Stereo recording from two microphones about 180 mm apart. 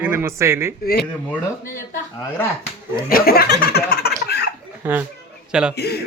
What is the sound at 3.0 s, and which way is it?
Snicker, 55° left (ahead or behind).